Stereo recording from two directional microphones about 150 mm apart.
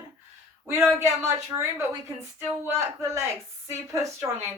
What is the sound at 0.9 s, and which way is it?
A woman's voice, 15° right (ahead or behind).